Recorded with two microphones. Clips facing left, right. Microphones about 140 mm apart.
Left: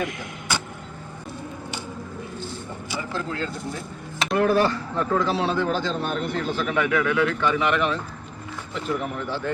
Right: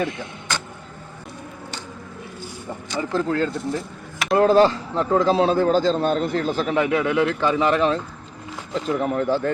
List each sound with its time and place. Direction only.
0.5 s vehicle: 10° left (ahead or behind)
2.9 s speech: 5° left (ahead or behind)
3.2 s a man's voice: 40° right (ahead or behind)
3.5 s speech: centre (ahead or behind)
4.4 s speech: 25° right (ahead or behind)
5.4 s a man's voice: 40° right (ahead or behind)
9.0 s speech: 45° right (ahead or behind)